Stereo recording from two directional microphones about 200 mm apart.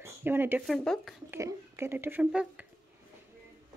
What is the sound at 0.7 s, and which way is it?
Speech, 5° left (ahead or behind).